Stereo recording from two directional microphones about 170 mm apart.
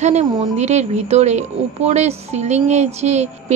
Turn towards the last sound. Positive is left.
turn(degrees=-40)  # may be behind; listen again after turning